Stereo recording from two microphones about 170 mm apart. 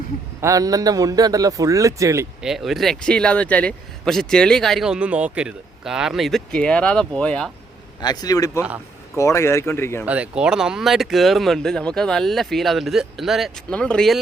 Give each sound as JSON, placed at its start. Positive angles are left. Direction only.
{"t": 0.4, "sound": "a man's voice", "side_deg": -20}
{"t": 2.4, "sound": "speech", "side_deg": 0}
{"t": 8.0, "sound": "speech", "side_deg": 20}
{"t": 10.1, "sound": "speech", "side_deg": -5}